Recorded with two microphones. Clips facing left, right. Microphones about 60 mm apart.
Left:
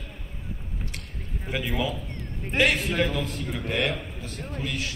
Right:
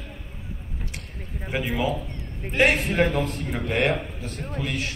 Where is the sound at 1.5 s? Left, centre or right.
Right.